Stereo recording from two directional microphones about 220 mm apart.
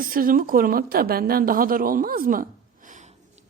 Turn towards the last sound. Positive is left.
turn(degrees=-35)  # may be behind; listen again after turning